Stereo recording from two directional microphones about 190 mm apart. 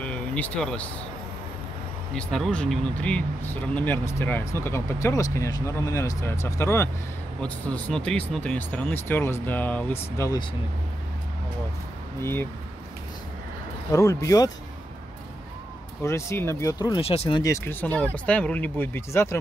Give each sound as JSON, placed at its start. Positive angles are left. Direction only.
{"t": 0.0, "sound": "vehicle", "side_deg": 5}
{"t": 2.1, "sound": "speech", "side_deg": 5}
{"t": 12.2, "sound": "speech", "side_deg": 15}
{"t": 13.9, "sound": "speech", "side_deg": 15}
{"t": 16.0, "sound": "speech", "side_deg": 15}
{"t": 17.4, "sound": "speech", "side_deg": 15}